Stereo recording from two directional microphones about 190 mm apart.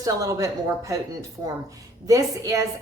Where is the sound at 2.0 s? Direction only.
20° right (ahead or behind).